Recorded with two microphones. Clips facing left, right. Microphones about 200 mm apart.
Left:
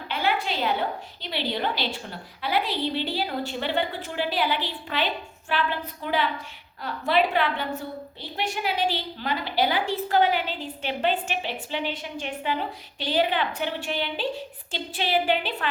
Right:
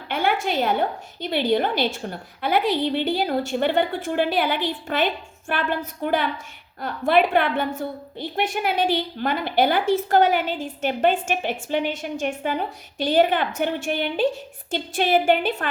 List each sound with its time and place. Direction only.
0.1 s a woman's voice: 50° right (ahead or behind)